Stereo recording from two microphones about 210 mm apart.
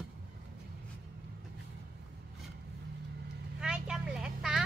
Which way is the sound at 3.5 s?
5° right (ahead or behind).